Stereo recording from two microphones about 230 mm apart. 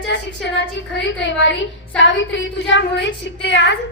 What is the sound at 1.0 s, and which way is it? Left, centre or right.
A woman's voice, left.